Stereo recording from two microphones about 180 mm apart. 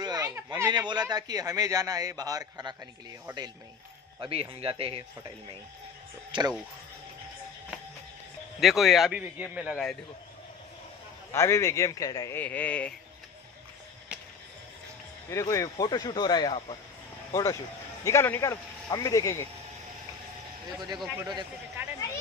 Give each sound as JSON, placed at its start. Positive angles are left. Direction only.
{"t": 0.0, "sound": "a sound", "side_deg": -20}
{"t": 1.1, "sound": "a man's voice", "side_deg": -20}
{"t": 6.3, "sound": "a man's voice", "side_deg": -25}
{"t": 8.5, "sound": "a man's voice", "side_deg": 0}
{"t": 11.3, "sound": "a man's voice", "side_deg": 15}
{"t": 15.2, "sound": "speech", "side_deg": 15}
{"t": 17.3, "sound": "a man's voice", "side_deg": 15}
{"t": 20.7, "sound": "a man's voice", "side_deg": -25}